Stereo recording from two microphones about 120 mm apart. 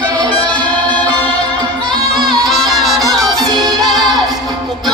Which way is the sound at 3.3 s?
35° right (ahead or behind).